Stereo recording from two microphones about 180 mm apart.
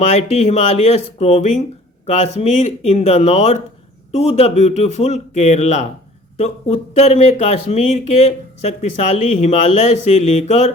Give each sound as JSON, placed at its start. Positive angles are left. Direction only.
{"t": 0.0, "sound": "speech", "side_deg": 35}